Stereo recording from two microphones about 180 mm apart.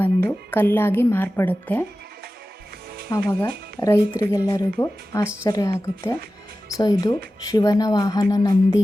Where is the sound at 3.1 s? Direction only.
15° left (ahead or behind).